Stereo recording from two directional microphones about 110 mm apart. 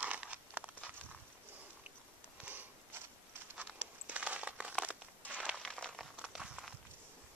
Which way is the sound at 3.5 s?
10° right (ahead or behind).